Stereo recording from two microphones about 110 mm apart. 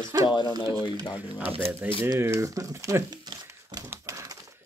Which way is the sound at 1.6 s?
60° right (ahead or behind).